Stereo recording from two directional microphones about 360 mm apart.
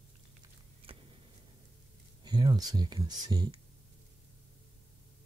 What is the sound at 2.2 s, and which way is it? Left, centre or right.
Speech, centre.